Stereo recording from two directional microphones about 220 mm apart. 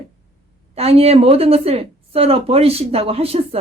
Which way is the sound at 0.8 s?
25° right (ahead or behind).